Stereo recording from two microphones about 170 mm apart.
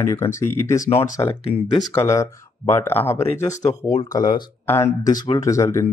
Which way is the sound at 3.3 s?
40° left (ahead or behind).